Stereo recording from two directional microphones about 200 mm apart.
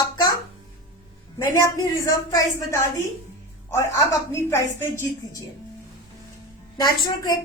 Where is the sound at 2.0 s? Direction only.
15° left (ahead or behind).